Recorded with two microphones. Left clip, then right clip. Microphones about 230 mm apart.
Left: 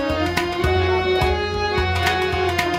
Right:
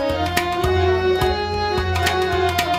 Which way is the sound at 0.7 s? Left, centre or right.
Centre.